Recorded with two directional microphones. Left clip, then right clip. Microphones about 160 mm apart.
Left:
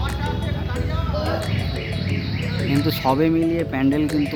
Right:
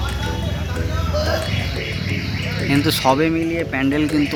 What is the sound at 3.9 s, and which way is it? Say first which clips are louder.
Speech: right 1 dB; 5° left (ahead or behind).